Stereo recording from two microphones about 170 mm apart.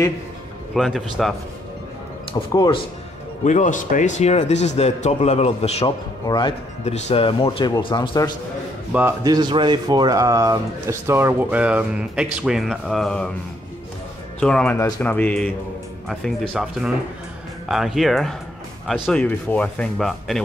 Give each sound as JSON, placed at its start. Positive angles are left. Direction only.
{"t": 0.7, "sound": "speech", "side_deg": 0}
{"t": 2.5, "sound": "speech", "side_deg": 20}
{"t": 3.4, "sound": "a man's voice", "side_deg": 45}
{"t": 6.2, "sound": "speech", "side_deg": 25}
{"t": 6.8, "sound": "speech", "side_deg": 40}
{"t": 9.2, "sound": "speech", "side_deg": -25}
{"t": 14.4, "sound": "speech", "side_deg": 5}